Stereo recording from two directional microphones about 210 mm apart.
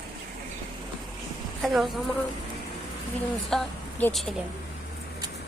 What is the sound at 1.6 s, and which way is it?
Speech, centre (ahead or behind).